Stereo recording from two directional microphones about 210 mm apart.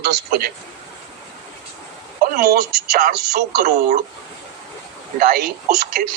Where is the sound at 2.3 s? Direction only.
45° right (ahead or behind).